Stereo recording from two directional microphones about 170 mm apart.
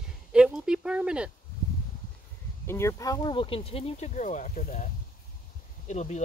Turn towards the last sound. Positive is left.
turn(degrees=40)  # may be behind; listen again after turning